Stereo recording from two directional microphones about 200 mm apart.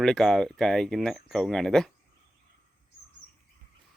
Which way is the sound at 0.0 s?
Centre (ahead or behind).